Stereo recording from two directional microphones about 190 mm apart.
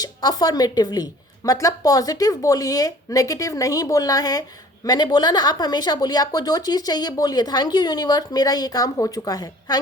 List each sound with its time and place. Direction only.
0.0 s speech: 20° left (ahead or behind)